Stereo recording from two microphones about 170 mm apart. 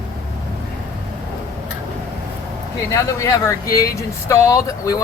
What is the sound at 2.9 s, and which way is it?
Speech, 20° left (ahead or behind).